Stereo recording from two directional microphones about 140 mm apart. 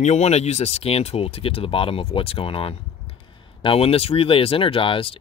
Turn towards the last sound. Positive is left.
turn(degrees=40)  # may be behind; listen again after turning